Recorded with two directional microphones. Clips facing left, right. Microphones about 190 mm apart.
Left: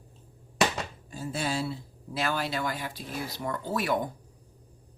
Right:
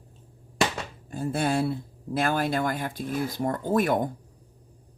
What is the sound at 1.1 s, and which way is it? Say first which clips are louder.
Speech: right 6 dB; 55° right (ahead or behind).